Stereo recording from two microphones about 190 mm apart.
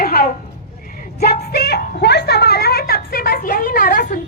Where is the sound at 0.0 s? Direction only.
50° left (ahead or behind).